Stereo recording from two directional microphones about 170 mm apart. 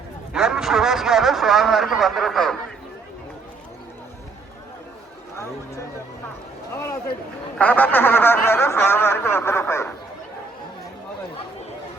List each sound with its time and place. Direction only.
0.3 s a man's voice: 5° right (ahead or behind)
7.6 s speech: 10° left (ahead or behind)